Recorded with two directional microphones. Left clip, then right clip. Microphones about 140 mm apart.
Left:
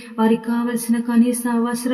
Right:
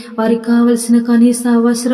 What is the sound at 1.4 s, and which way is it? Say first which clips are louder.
Speech: right 8 dB; 30° right (ahead or behind).